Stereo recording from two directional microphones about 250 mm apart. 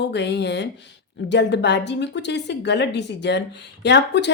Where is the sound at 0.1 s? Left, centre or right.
Left.